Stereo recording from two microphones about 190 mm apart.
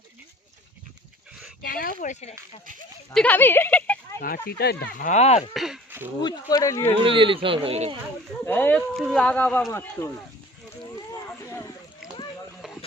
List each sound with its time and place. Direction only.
1.6 s speech: 50° left (ahead or behind)
3.2 s speech: 10° left (ahead or behind)
4.4 s speech: 55° left (ahead or behind)
5.0 s speech: 35° left (ahead or behind)
5.4 s speech: centre (ahead or behind)
6.2 s speech: 20° left (ahead or behind)
7.0 s speech: 25° right (ahead or behind)
8.4 s speech: 10° left (ahead or behind)
12.6 s a sound: 5° right (ahead or behind)